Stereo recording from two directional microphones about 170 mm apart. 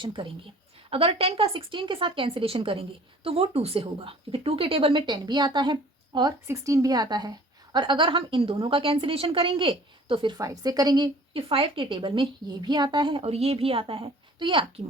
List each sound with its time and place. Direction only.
0.0 s a woman's voice: 30° right (ahead or behind)